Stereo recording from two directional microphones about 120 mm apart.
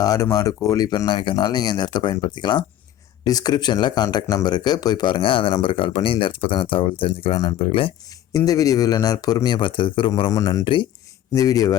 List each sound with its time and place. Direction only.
0.0 s speech: 30° left (ahead or behind); by 7.9 s 50° left (ahead or behind)
8.3 s speech: 30° left (ahead or behind)
10.2 s speech: 30° left (ahead or behind)